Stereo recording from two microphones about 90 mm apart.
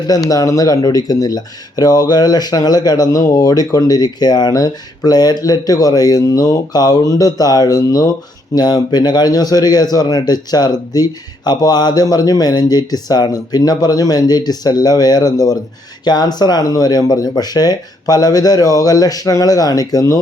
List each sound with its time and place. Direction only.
0.3 s speech: 40° left (ahead or behind)